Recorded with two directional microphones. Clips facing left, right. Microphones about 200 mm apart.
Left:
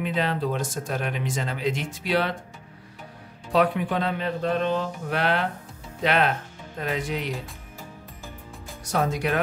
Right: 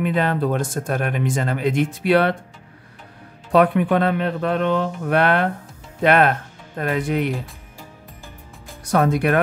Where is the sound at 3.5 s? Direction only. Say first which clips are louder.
Right 6 dB; 55° right (ahead or behind).